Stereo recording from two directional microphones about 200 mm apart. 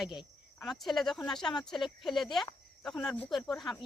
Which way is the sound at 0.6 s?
Centre (ahead or behind).